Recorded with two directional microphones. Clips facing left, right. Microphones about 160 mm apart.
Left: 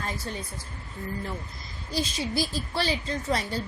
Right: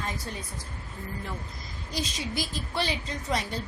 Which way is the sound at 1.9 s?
35° left (ahead or behind).